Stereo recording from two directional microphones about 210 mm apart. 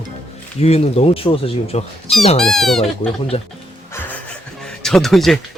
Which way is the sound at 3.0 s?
25° left (ahead or behind).